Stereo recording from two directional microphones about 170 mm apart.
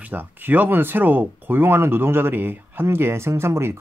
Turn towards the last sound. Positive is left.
turn(degrees=-15)  # may be behind; listen again after turning